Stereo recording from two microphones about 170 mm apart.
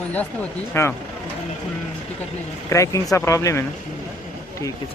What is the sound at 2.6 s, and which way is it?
A man's voice, 20° left (ahead or behind).